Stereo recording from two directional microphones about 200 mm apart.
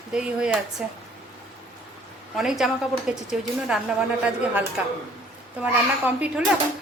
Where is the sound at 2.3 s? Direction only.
Centre (ahead or behind).